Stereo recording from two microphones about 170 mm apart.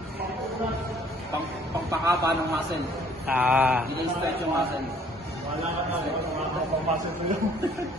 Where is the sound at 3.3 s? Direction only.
10° right (ahead or behind).